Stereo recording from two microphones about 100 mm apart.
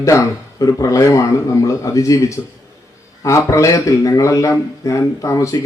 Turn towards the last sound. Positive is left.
turn(degrees=30)  # may be behind; listen again after turning